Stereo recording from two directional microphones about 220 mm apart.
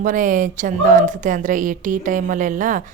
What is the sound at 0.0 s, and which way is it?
A woman's voice, 35° right (ahead or behind).